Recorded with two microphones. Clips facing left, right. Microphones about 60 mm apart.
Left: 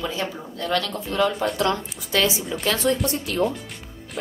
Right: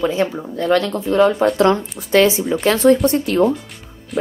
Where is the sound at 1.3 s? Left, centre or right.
Right.